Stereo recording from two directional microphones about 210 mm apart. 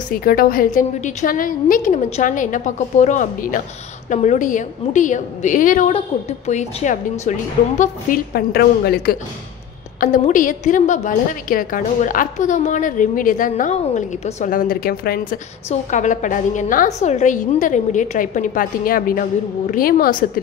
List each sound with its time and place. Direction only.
0.2 s a woman's voice: 45° left (ahead or behind)